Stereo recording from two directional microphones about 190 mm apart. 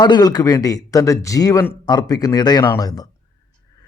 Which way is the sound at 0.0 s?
20° left (ahead or behind).